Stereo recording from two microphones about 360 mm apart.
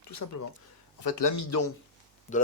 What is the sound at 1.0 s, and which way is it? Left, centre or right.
Speech, left.